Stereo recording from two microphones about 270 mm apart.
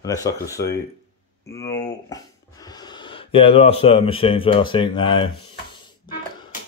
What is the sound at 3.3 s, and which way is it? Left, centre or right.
Speech, centre.